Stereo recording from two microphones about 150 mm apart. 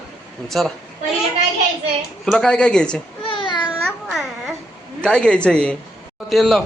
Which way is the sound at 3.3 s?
35° left (ahead or behind).